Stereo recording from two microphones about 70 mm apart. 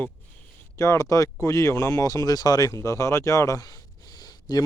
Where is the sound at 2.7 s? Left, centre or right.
Left.